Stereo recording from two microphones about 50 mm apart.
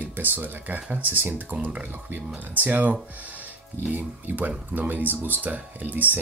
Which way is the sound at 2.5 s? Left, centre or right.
Right.